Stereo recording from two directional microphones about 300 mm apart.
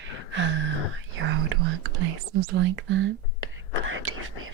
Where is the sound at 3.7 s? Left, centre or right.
Right.